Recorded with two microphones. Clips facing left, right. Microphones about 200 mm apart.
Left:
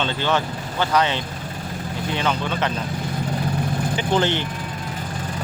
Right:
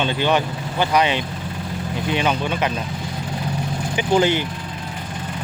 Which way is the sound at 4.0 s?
10° right (ahead or behind).